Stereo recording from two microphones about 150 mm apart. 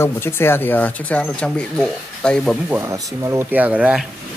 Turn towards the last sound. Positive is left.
turn(degrees=-10)  # may be behind; listen again after turning